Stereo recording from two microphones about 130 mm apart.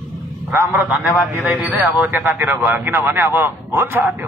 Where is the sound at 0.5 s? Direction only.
15° right (ahead or behind).